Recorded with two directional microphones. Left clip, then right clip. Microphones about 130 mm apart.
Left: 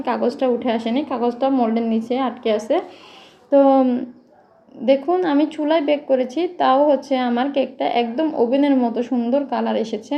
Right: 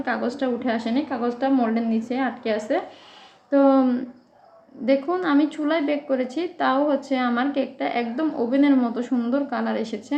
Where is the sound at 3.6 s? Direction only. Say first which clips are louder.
Left 3 dB; 15° left (ahead or behind).